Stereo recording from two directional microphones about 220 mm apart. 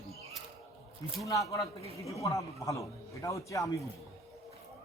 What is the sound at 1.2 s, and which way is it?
A man's voice, 15° left (ahead or behind).